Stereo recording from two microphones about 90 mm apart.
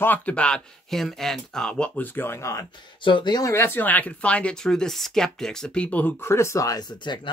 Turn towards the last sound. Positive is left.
turn(degrees=55)  # may be behind; listen again after turning